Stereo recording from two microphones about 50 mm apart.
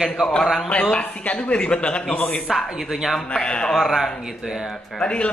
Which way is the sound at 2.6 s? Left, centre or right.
Centre.